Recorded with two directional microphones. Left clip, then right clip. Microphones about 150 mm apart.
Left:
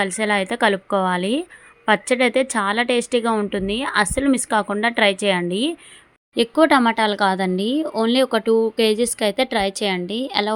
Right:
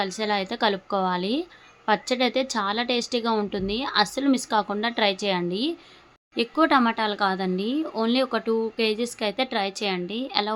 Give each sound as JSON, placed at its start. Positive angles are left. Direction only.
{"t": 0.0, "sound": "a woman's voice", "side_deg": 35}
{"t": 6.3, "sound": "speech", "side_deg": 40}